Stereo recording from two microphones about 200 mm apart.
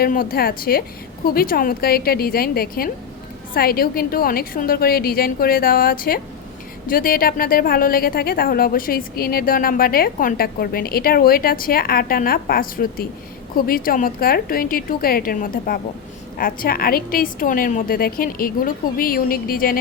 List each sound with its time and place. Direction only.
0.0 s a woman's voice: 45° left (ahead or behind)